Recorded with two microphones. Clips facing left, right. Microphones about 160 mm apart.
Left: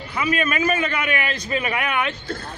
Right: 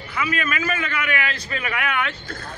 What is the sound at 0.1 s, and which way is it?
A man's voice, 30° left (ahead or behind).